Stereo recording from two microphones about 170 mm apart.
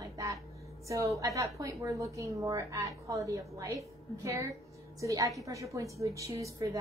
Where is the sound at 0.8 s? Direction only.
15° right (ahead or behind).